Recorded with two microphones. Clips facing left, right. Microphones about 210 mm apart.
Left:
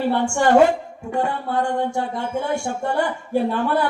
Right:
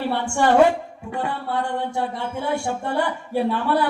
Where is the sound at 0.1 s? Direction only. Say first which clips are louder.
Left 2 dB; 45° left (ahead or behind).